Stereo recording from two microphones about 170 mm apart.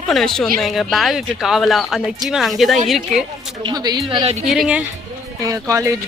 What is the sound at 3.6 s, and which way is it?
Speech, 25° right (ahead or behind).